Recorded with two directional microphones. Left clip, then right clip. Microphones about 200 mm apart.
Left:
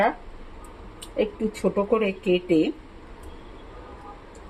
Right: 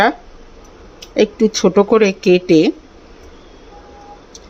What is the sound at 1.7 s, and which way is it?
Speech, 55° right (ahead or behind).